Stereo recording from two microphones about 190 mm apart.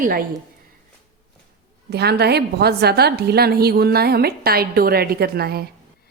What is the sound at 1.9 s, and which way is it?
A woman's voice, 60° right (ahead or behind).